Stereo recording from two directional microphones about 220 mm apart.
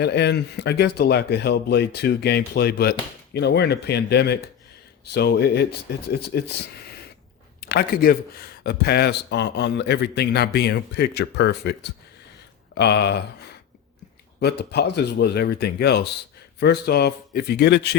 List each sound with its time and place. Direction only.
0.0 s speech: 50° left (ahead or behind)
7.6 s speech: 45° left (ahead or behind)
14.3 s speech: 50° left (ahead or behind)